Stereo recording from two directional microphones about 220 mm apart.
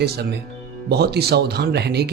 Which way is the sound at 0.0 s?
45° right (ahead or behind).